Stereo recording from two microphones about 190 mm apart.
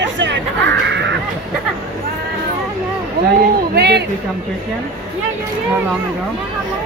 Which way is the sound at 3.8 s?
60° right (ahead or behind).